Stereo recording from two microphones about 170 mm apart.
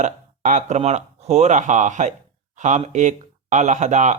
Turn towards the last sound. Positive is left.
turn(degrees=-45)  # may be behind; listen again after turning